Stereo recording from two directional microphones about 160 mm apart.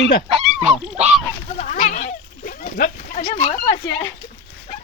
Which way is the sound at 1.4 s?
45° left (ahead or behind).